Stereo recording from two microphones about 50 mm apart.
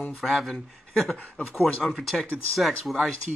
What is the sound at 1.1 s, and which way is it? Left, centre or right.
Speech, left.